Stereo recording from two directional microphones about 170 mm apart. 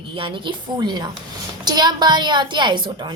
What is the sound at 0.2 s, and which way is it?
A woman's voice, 30° right (ahead or behind).